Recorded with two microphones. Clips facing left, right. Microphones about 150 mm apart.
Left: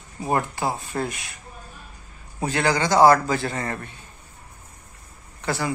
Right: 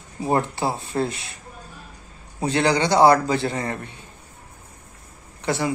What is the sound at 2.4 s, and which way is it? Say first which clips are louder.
Speech: right 2 dB; 20° right (ahead or behind).